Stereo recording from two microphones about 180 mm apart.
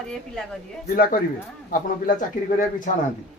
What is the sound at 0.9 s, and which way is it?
Speech, 50° left (ahead or behind).